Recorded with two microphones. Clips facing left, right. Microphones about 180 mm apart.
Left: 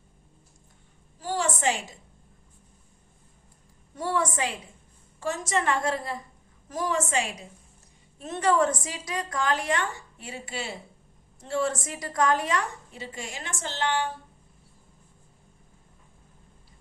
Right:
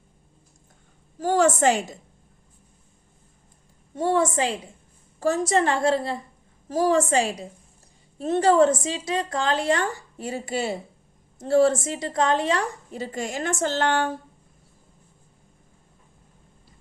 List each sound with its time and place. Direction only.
1.2 s a woman's voice: 45° right (ahead or behind)
3.9 s a woman's voice: 25° right (ahead or behind)
12.9 s a woman's voice: 40° right (ahead or behind)